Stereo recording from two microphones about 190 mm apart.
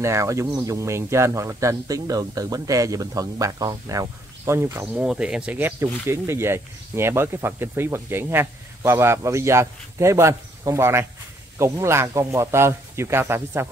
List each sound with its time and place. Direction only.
0.0 s speech: 15° right (ahead or behind)
5.0 s speech: 5° right (ahead or behind)